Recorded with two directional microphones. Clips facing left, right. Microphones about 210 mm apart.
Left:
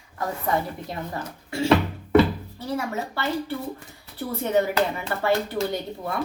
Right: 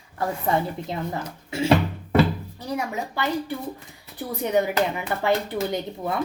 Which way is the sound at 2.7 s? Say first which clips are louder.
Even; 15° right (ahead or behind).